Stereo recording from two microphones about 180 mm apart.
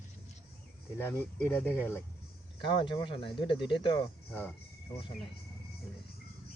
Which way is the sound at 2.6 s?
25° left (ahead or behind).